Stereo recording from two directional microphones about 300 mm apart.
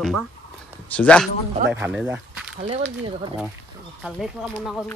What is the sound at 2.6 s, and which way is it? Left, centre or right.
Speech, centre.